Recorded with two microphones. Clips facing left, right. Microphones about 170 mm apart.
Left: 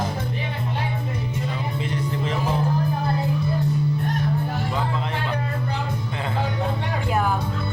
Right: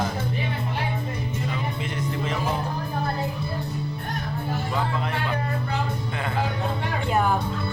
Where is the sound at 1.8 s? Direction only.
30° left (ahead or behind).